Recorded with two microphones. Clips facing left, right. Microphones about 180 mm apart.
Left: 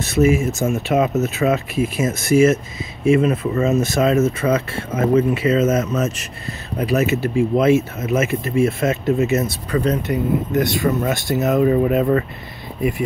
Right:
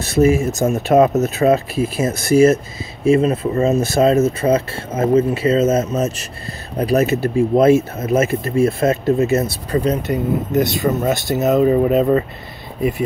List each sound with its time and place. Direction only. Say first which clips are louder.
0.0 s speech: right 2 dB; 35° right (ahead or behind)